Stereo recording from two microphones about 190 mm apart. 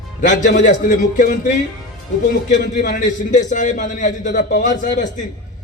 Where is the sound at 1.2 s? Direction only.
45° left (ahead or behind).